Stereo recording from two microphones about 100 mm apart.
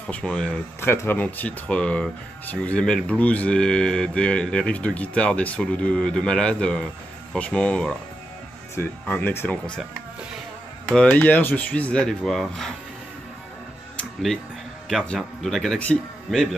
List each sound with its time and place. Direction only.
0.0 s speech: 10° left (ahead or behind)
0.7 s speech: 25° left (ahead or behind)
10.9 s speech: 10° left (ahead or behind)
14.9 s speech: centre (ahead or behind)